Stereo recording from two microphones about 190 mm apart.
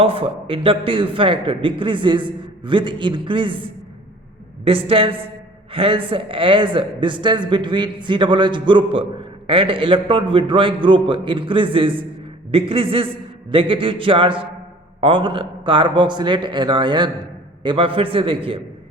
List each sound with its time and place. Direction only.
0.0 s a man's voice: 30° right (ahead or behind)